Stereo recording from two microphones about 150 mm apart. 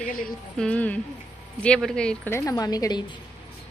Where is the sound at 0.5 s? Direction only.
10° left (ahead or behind).